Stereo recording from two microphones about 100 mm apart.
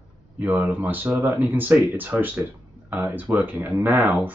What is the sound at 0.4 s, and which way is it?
Speech, 20° right (ahead or behind).